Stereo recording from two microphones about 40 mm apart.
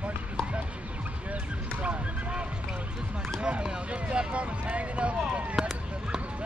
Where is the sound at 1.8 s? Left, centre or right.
Right.